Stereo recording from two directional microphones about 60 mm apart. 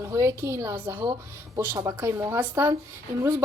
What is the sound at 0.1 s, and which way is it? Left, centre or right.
A woman's voice, right.